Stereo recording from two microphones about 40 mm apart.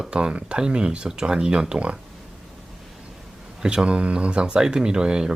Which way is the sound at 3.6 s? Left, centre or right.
Right.